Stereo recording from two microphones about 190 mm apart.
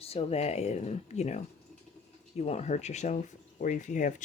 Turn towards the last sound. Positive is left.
turn(degrees=40)  # may be behind; listen again after turning